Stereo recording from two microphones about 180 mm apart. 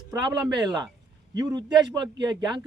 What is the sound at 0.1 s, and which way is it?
Speech, 20° right (ahead or behind).